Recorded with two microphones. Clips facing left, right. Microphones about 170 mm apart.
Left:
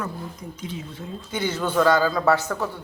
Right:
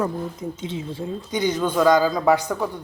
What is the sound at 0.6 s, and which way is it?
Speech, 25° right (ahead or behind).